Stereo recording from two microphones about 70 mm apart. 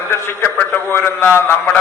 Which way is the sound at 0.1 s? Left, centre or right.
Left.